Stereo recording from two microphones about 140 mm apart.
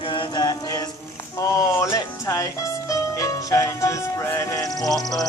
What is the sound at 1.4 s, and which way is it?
Music, 25° left (ahead or behind).